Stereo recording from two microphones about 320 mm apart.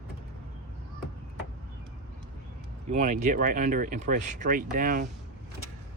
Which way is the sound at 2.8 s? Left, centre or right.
Right.